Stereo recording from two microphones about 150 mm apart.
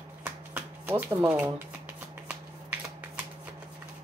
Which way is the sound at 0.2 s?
10° right (ahead or behind).